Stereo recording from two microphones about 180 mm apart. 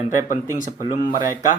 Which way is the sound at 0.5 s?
45° left (ahead or behind).